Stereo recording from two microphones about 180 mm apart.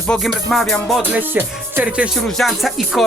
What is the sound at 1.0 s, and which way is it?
Music, 10° right (ahead or behind).